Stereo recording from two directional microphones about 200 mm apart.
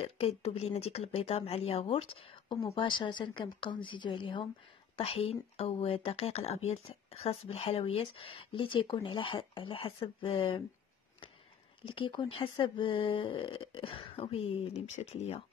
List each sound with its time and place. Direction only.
0.0 s speech: 30° left (ahead or behind)
11.8 s speech: 25° left (ahead or behind)